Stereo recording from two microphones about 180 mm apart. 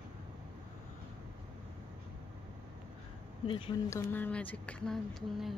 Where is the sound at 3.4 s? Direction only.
25° left (ahead or behind).